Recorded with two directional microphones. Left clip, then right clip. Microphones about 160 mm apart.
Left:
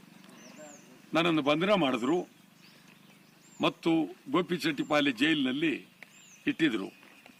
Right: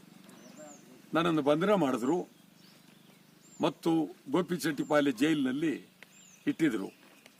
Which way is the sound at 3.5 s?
15° right (ahead or behind).